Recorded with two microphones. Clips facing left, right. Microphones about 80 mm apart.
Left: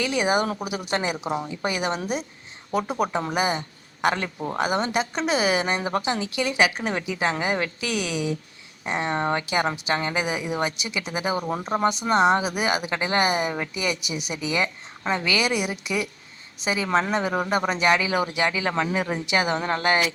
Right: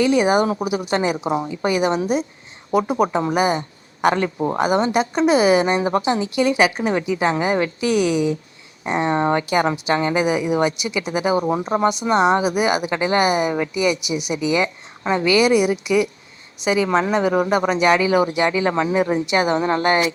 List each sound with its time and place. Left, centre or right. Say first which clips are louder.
0.0 s a woman's voice: right 7 dB; right
10.8 s a woman's voice: right 7 dB; left
11.2 s speech: right 7 dB; right
14.0 s speech: right 7 dB; left
14.6 s a woman's voice: right 4 dB; right
16.7 s speech: right 5 dB; right
18.0 s speech: right 6 dB; right